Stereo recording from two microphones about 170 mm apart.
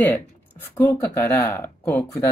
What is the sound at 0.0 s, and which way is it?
Speech, 10° left (ahead or behind).